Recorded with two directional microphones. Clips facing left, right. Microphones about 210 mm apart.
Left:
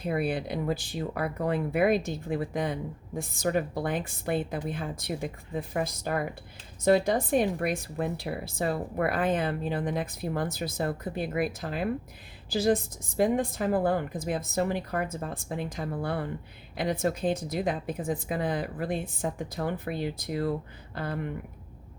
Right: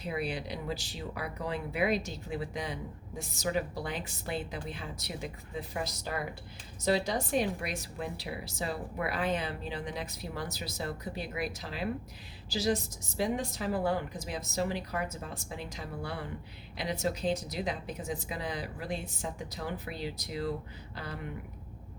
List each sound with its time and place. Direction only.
0.0 s speech: 55° left (ahead or behind)